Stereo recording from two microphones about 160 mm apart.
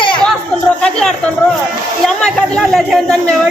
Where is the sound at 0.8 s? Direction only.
5° left (ahead or behind).